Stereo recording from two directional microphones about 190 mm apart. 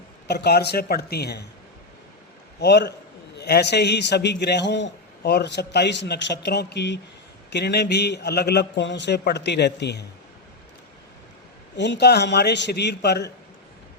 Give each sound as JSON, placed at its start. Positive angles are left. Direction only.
{"t": 0.3, "sound": "a man's voice", "side_deg": 60}
{"t": 2.6, "sound": "a man's voice", "side_deg": 65}
{"t": 11.8, "sound": "a man's voice", "side_deg": 65}